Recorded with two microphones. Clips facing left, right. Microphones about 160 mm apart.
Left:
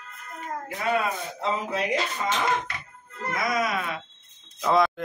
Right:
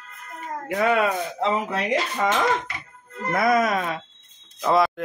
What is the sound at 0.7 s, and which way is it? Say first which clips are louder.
Speech: right 6 dB; 75° right (ahead or behind).